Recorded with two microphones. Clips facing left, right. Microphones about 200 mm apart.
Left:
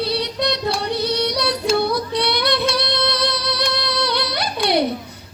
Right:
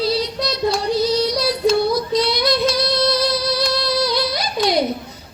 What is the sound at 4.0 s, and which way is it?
Music, 65° left (ahead or behind).